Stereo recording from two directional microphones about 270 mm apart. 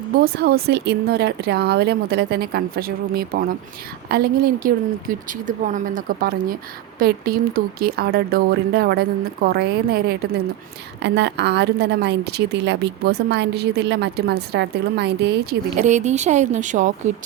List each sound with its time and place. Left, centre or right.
0.3 s a woman's voice: right
15.8 s a woman's voice: right